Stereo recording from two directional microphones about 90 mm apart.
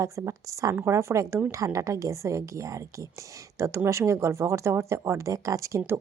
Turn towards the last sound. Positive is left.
turn(degrees=-35)  # may be behind; listen again after turning